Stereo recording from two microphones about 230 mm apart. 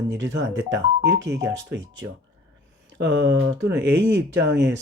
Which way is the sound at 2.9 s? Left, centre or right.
Right.